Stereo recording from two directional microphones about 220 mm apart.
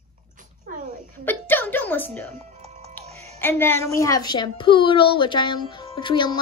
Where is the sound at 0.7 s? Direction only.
35° right (ahead or behind).